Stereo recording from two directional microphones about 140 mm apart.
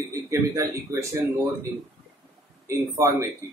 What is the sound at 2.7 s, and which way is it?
Speech, 20° right (ahead or behind).